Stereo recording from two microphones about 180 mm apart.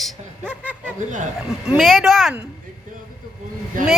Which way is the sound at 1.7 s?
Centre (ahead or behind).